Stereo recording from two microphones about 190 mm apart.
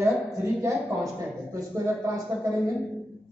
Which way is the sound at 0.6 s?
15° right (ahead or behind).